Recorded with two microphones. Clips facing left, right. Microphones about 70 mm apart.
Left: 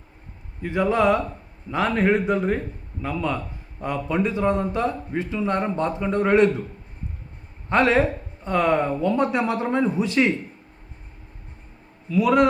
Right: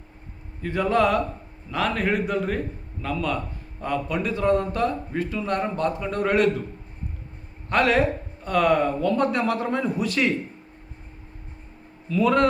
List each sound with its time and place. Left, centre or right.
0.6 s a man's voice: centre
7.7 s a man's voice: left
12.0 s a man's voice: centre